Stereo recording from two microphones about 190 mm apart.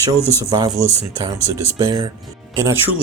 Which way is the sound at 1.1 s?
20° right (ahead or behind).